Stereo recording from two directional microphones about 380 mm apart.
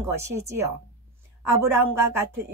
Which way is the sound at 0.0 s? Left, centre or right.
Centre.